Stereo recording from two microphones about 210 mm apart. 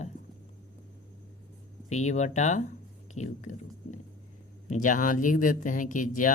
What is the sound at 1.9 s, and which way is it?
Speech, 35° left (ahead or behind).